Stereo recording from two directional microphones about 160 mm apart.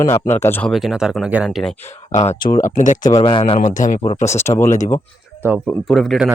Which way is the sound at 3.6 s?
50° left (ahead or behind).